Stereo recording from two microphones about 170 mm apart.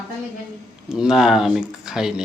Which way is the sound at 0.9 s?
5° right (ahead or behind).